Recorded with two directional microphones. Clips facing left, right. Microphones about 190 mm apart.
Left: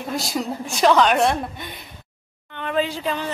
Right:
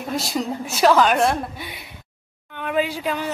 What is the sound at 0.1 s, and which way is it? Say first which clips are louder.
A woman's voice: right 1 dB; centre (ahead or behind).